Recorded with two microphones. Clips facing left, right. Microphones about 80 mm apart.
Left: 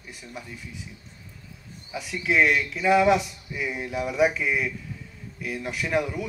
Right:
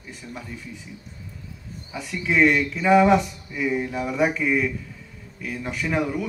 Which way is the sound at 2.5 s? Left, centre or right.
Right.